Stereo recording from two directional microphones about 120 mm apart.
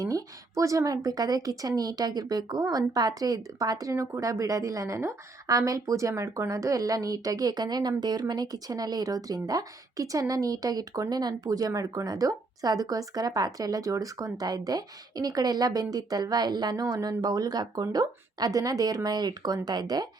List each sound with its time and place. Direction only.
0.0 s speech: 30° right (ahead or behind)